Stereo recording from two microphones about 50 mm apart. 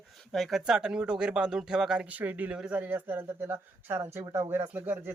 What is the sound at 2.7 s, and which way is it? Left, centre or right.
Speech, right.